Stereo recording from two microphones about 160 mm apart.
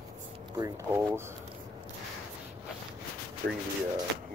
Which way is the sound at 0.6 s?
20° right (ahead or behind).